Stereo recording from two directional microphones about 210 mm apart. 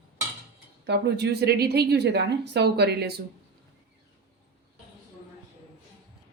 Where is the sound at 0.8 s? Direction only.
55° right (ahead or behind).